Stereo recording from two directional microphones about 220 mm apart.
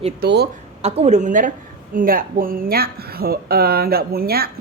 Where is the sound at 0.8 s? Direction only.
30° right (ahead or behind).